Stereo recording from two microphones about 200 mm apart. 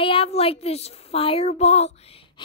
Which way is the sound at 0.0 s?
30° left (ahead or behind).